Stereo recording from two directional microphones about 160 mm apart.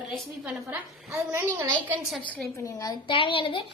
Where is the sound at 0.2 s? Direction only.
5° right (ahead or behind).